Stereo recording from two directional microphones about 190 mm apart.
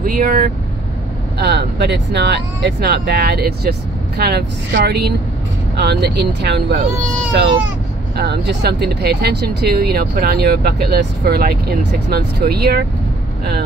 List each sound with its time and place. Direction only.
0.0 s speech: 50° right (ahead or behind)
8.2 s speech: 55° right (ahead or behind)